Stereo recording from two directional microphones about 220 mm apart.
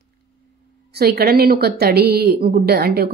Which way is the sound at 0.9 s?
45° right (ahead or behind).